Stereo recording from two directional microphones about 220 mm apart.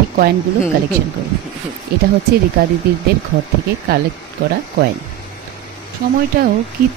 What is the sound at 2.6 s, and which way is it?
Speech, 45° right (ahead or behind).